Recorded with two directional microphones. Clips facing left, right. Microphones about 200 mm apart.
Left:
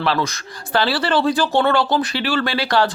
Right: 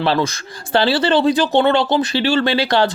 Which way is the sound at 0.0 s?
30° right (ahead or behind).